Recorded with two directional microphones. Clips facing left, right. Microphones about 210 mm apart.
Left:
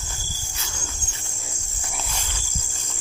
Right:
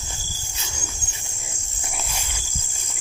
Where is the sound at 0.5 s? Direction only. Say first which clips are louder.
Right 1 dB; 20° right (ahead or behind).